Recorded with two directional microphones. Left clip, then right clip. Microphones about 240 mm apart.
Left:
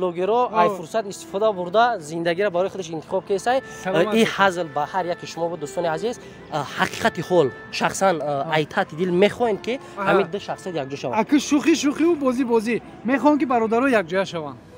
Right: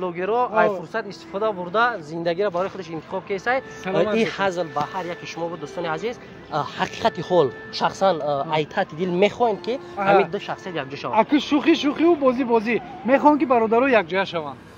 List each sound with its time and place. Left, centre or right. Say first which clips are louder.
0.0 s speech: left 2 dB; left
4.6 s speech: left 1 dB; centre
11.1 s speech: right 2 dB; left